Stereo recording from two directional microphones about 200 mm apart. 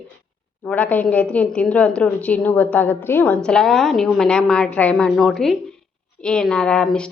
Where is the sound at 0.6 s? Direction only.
10° left (ahead or behind).